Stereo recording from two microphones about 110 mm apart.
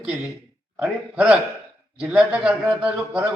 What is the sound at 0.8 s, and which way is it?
A man's voice, 10° right (ahead or behind).